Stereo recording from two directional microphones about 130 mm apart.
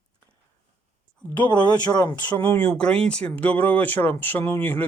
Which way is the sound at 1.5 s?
35° left (ahead or behind).